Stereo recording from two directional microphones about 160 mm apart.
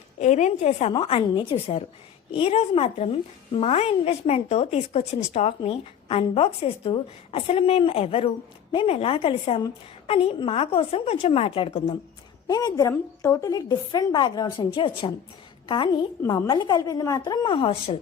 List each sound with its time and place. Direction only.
0.2 s a woman's voice: 50° left (ahead or behind)
0.9 s a woman's voice: 35° left (ahead or behind)
12.5 s a woman's voice: 25° left (ahead or behind)